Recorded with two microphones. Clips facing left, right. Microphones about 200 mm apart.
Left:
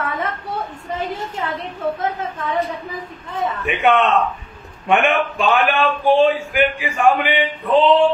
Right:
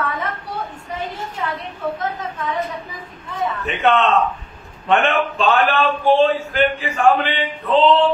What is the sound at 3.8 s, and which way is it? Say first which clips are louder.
A man's voice: even; 15° left (ahead or behind).